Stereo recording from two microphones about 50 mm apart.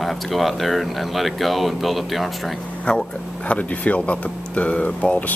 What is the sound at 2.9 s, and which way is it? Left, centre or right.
Speech, left.